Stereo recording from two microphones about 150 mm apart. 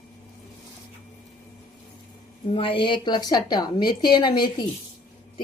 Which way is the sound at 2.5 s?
35° left (ahead or behind).